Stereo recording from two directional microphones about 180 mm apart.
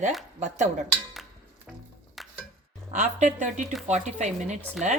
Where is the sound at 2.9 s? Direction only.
45° right (ahead or behind).